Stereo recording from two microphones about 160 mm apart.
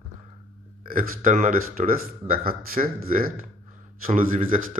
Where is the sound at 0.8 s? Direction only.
60° right (ahead or behind).